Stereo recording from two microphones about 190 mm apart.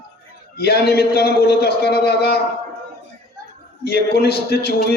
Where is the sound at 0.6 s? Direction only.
60° left (ahead or behind).